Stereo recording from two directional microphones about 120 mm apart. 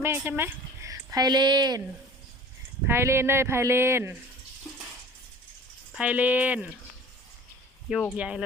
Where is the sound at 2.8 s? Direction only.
20° right (ahead or behind).